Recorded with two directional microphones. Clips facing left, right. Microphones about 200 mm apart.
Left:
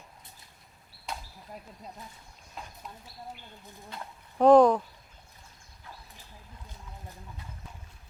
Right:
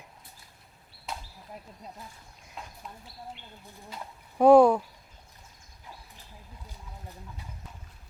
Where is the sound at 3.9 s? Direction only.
5° right (ahead or behind).